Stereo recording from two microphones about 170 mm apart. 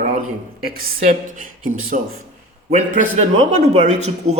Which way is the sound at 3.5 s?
40° right (ahead or behind).